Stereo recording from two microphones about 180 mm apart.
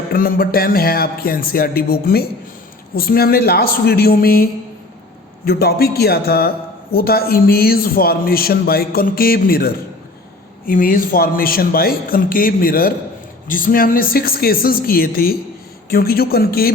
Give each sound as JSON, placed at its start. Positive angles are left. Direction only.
{"t": 0.1, "sound": "a man's voice", "side_deg": 55}
{"t": 5.5, "sound": "a man's voice", "side_deg": 60}